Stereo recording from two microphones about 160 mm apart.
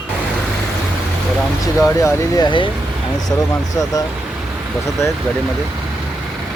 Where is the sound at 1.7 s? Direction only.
20° left (ahead or behind).